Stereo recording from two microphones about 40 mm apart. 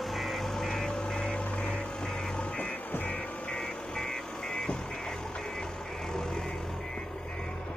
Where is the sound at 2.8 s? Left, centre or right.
Left.